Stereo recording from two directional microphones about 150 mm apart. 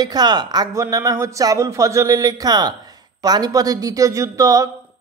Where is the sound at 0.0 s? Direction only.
25° right (ahead or behind).